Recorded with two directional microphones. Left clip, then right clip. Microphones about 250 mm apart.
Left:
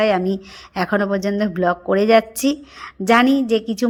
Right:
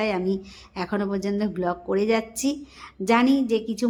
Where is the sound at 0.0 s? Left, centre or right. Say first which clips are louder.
Left 8 dB; centre.